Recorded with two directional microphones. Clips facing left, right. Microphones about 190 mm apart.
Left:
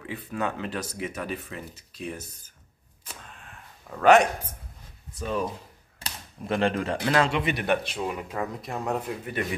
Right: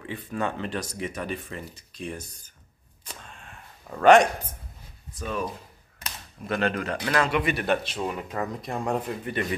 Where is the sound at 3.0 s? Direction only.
5° left (ahead or behind).